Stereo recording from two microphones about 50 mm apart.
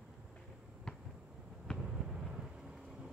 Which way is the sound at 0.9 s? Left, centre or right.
Centre.